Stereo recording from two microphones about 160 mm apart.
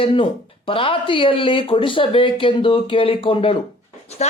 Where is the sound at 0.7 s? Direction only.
35° left (ahead or behind).